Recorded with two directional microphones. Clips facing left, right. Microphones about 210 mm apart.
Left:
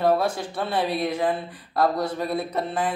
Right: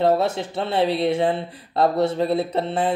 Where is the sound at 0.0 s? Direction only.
25° right (ahead or behind).